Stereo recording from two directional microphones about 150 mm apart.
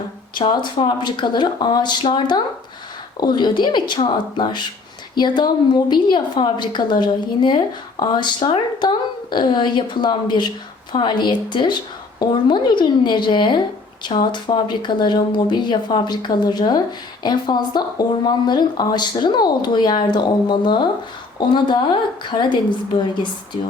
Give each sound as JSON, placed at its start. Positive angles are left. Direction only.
{"t": 0.3, "sound": "a woman's voice", "side_deg": 30}